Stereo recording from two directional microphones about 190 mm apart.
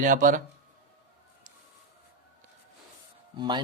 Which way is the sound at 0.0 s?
45° right (ahead or behind).